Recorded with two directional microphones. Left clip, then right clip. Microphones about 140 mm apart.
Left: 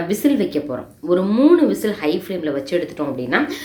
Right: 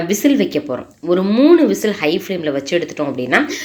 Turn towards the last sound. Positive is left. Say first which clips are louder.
# right 4 dB
turn(degrees=-25)  # may be behind; listen again after turning